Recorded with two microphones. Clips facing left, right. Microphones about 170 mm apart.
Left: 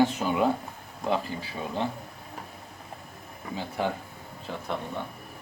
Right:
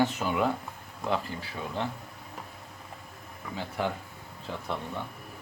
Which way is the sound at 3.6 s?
15° left (ahead or behind).